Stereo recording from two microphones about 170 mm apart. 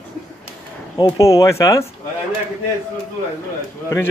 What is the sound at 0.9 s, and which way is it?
Speech, 20° left (ahead or behind).